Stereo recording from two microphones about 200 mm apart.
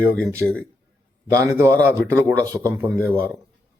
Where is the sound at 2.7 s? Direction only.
15° right (ahead or behind).